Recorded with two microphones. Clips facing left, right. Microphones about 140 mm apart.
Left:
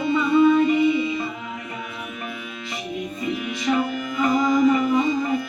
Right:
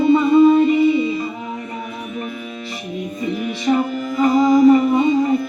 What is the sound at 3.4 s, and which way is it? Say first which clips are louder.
Music: right 5 dB; 35° right (ahead or behind).